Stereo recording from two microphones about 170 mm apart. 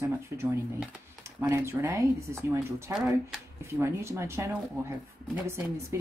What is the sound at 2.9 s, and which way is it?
Speech, 5° right (ahead or behind).